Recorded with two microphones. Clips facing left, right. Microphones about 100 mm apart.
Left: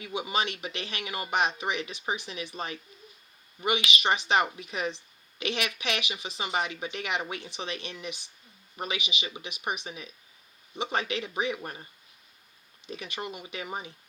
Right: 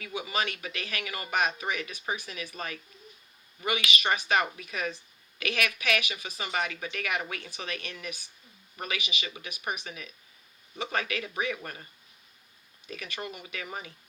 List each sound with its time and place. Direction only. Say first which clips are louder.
0.0 s a woman's voice: left 2 dB; 25° left (ahead or behind)
12.9 s a woman's voice: left 2 dB; 20° left (ahead or behind)